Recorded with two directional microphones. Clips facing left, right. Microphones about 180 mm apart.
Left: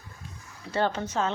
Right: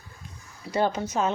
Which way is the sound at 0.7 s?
10° right (ahead or behind).